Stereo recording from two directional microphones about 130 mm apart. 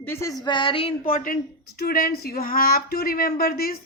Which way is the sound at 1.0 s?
90° left.